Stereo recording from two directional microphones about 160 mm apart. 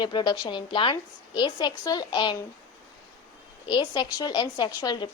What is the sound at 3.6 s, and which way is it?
A woman's voice, 30° left (ahead or behind).